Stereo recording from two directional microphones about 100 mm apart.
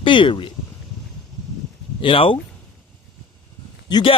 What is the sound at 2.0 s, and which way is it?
Speech, 65° left (ahead or behind).